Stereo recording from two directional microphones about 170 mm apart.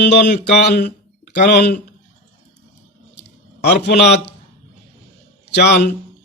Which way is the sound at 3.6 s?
70° left (ahead or behind).